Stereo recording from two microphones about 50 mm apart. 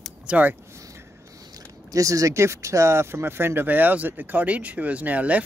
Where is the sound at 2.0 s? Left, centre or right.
Right.